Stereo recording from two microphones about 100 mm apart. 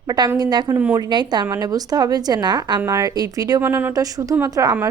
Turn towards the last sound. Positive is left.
turn(degrees=-30)  # may be behind; listen again after turning